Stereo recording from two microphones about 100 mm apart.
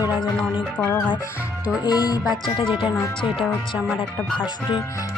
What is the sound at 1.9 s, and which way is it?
Speech, 40° left (ahead or behind).